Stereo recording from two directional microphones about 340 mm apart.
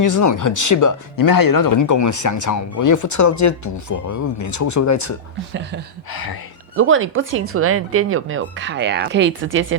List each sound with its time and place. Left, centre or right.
0.0 s speech: left
6.1 s speech: left
6.7 s speech: right